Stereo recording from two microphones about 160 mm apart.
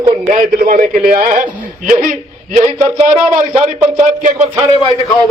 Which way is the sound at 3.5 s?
5° right (ahead or behind).